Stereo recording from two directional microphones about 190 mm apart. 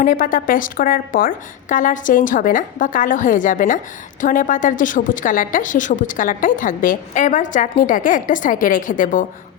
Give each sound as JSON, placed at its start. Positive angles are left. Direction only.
{"t": 0.0, "sound": "a woman's voice", "side_deg": 45}